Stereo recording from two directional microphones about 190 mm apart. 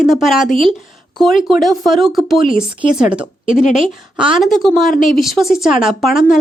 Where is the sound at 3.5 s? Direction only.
40° left (ahead or behind).